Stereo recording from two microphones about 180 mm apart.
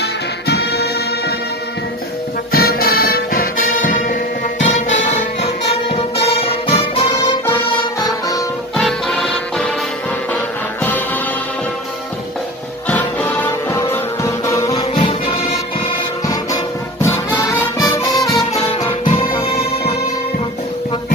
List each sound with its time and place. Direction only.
0.0 s music: 65° left (ahead or behind)
2.5 s music: 60° left (ahead or behind); by 7.5 s 30° left (ahead or behind)
7.5 s music: 20° left (ahead or behind)
8.7 s music: centre (ahead or behind)
12.8 s music: 10° left (ahead or behind)
15.0 s music: 35° left (ahead or behind)
16.3 s music: 20° left (ahead or behind)